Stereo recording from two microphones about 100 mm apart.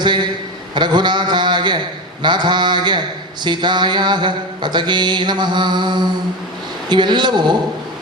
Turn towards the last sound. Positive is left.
turn(degrees=-45)  # may be behind; listen again after turning